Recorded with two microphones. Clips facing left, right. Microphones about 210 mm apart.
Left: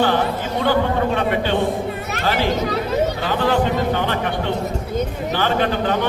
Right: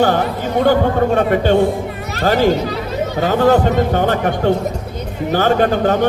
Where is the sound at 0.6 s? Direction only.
45° right (ahead or behind).